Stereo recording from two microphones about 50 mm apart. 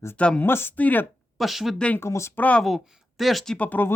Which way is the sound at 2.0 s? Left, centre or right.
Left.